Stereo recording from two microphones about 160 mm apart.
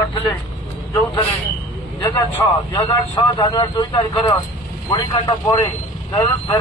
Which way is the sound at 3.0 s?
40° left (ahead or behind).